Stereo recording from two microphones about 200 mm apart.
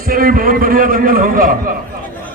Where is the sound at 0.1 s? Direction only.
45° right (ahead or behind).